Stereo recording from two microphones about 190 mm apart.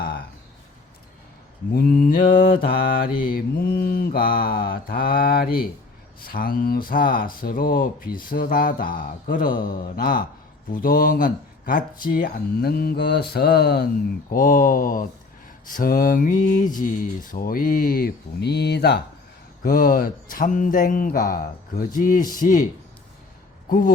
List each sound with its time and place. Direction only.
1.7 s mantra: 50° left (ahead or behind)
14.3 s mantra: 45° left (ahead or behind)
23.6 s speech: 45° left (ahead or behind)